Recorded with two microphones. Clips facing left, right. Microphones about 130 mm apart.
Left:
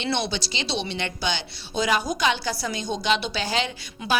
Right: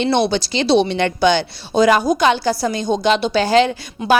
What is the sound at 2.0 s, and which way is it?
A woman's voice, 40° right (ahead or behind).